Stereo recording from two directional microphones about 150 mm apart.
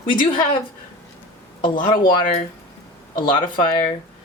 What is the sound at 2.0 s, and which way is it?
Speech, 60° left (ahead or behind).